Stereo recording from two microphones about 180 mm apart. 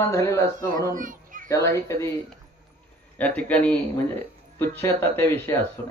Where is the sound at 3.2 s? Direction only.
10° left (ahead or behind).